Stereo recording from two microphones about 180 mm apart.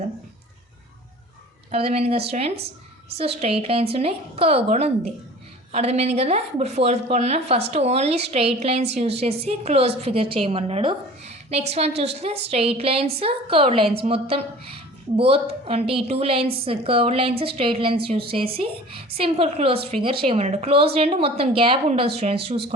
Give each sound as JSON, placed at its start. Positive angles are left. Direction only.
{"t": 1.7, "sound": "a woman's voice", "side_deg": -35}